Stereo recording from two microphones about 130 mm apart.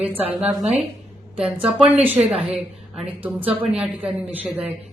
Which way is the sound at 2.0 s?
50° right (ahead or behind).